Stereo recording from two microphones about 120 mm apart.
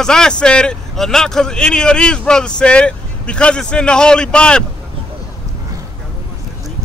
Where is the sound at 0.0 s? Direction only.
5° left (ahead or behind).